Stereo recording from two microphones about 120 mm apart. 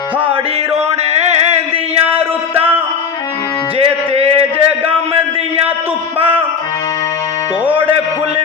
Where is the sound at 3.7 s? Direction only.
55° right (ahead or behind).